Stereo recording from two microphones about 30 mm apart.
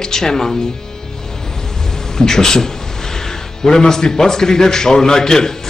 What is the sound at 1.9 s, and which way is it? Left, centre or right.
A man's voice, centre.